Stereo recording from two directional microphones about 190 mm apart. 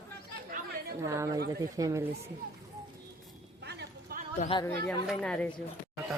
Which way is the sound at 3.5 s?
60° right (ahead or behind).